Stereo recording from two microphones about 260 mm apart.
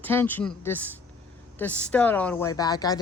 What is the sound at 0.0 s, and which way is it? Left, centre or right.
Speech, centre.